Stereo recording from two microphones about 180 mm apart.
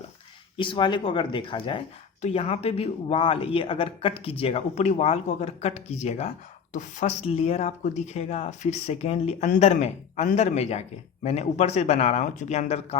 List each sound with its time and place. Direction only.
0.5 s speech: 25° left (ahead or behind)